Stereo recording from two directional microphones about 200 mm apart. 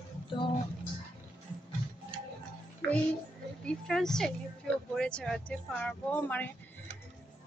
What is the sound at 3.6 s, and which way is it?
Speech, centre (ahead or behind).